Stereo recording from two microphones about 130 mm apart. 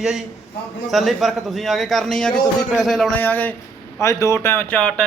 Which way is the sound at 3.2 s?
15° left (ahead or behind).